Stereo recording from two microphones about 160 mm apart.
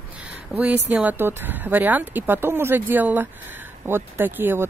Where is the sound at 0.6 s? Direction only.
10° right (ahead or behind).